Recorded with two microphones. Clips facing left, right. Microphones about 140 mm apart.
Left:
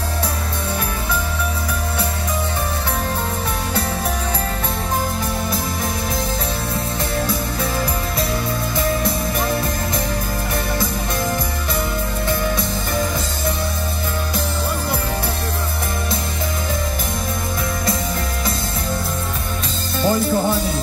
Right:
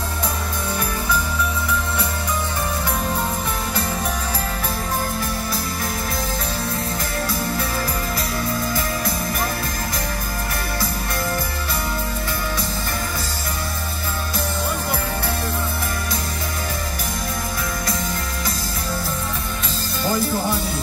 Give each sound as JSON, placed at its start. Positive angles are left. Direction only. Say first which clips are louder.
{"t": 20.0, "sound": "music", "louder": "left 4 dB", "side_deg": 25}